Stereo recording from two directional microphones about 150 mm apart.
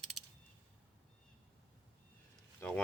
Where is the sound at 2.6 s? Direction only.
15° left (ahead or behind).